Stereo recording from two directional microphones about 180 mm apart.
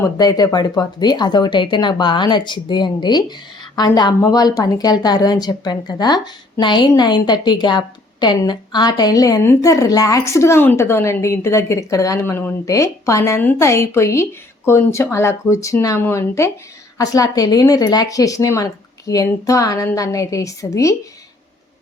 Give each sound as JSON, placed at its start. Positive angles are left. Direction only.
{"t": 0.0, "sound": "a woman's voice", "side_deg": 20}